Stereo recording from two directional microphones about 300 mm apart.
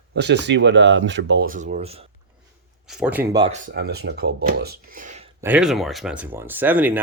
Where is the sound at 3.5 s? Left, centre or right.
Right.